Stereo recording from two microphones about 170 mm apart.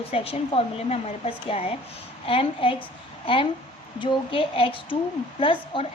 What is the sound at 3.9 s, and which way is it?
A woman's voice, 30° left (ahead or behind).